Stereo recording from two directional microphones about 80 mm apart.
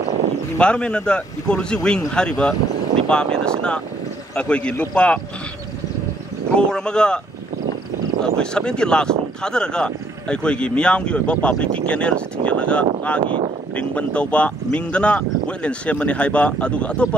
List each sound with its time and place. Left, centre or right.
0.6 s speech: centre
6.5 s speech: centre
8.2 s speech: centre
13.2 s speech: right
13.7 s speech: centre